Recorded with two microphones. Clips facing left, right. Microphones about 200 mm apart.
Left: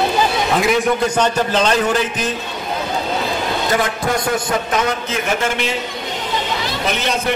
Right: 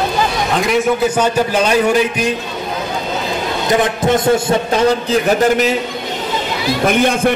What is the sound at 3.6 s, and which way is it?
A man's voice, 20° right (ahead or behind).